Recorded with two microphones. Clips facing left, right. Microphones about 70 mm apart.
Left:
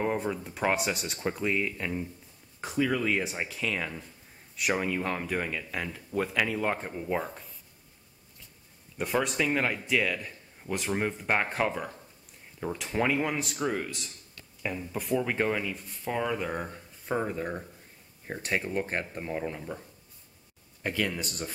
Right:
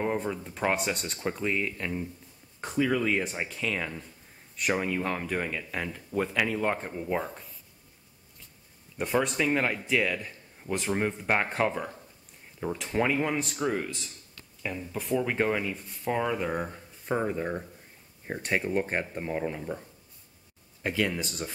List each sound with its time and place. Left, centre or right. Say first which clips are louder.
0.0 s a man's voice: even; centre
8.9 s a man's voice: right 1 dB; centre
20.8 s a man's voice: right 2 dB; centre